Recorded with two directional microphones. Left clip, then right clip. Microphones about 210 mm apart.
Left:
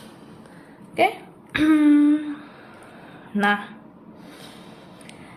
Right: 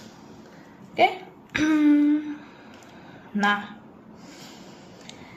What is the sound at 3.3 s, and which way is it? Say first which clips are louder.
Speech: left 2 dB; 20° left (ahead or behind).